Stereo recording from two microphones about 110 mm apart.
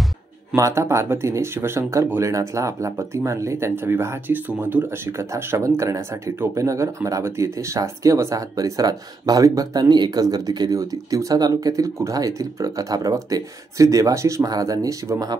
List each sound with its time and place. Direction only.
0.6 s speech: 25° right (ahead or behind)